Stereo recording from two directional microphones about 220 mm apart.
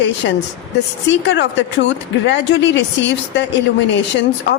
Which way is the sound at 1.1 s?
55° left (ahead or behind).